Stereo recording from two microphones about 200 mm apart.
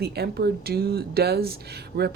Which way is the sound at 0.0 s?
55° right (ahead or behind).